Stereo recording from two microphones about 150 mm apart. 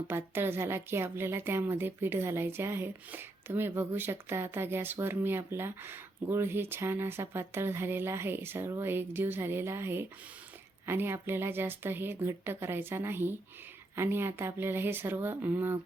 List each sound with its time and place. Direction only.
0.1 s a woman's voice: 15° right (ahead or behind)